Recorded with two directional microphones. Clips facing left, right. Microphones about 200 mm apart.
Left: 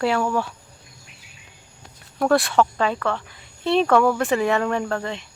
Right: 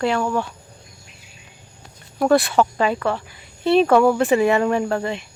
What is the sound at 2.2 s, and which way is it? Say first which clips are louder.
Speech: right 2 dB; centre (ahead or behind).